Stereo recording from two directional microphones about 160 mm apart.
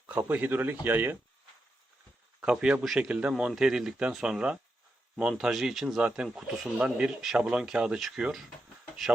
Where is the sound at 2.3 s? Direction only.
5° right (ahead or behind).